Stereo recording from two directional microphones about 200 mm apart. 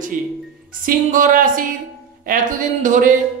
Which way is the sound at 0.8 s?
40° right (ahead or behind).